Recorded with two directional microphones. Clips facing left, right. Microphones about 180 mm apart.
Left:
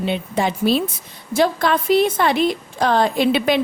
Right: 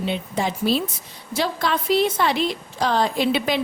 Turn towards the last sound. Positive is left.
turn(degrees=60)  # may be behind; listen again after turning